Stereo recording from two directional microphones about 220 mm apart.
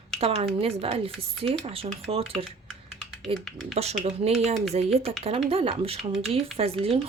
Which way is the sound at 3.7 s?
30° right (ahead or behind).